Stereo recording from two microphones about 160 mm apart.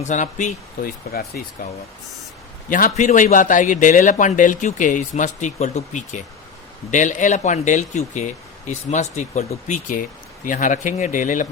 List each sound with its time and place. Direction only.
0.0 s a man's voice: 50° left (ahead or behind)
2.6 s a man's voice: 55° left (ahead or behind)